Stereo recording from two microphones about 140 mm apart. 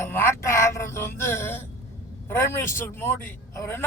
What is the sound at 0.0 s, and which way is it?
Music, 15° left (ahead or behind).